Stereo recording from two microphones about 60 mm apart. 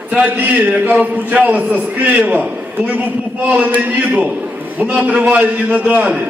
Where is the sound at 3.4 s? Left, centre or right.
Right.